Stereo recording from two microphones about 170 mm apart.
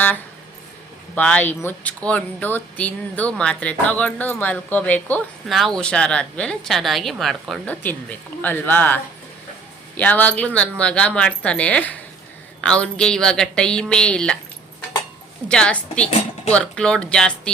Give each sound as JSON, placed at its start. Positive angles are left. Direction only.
{"t": 1.1, "sound": "speech", "side_deg": 10}
{"t": 10.0, "sound": "speech", "side_deg": 10}
{"t": 15.4, "sound": "speech", "side_deg": 5}